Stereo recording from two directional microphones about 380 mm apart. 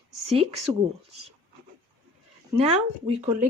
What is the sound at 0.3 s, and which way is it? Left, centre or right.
Speech, centre.